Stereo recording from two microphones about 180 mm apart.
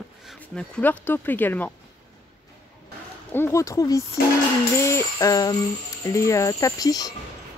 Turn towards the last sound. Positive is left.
turn(degrees=20)  # may be behind; listen again after turning